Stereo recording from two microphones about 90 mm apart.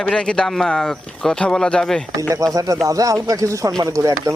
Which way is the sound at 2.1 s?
40° right (ahead or behind).